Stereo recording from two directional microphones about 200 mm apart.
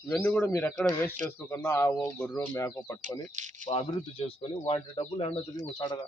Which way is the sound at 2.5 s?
15° left (ahead or behind).